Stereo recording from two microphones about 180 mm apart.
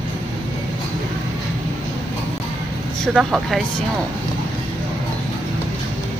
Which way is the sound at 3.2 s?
Centre (ahead or behind).